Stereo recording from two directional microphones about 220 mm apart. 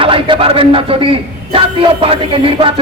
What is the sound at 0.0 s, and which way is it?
A man's voice, 25° right (ahead or behind).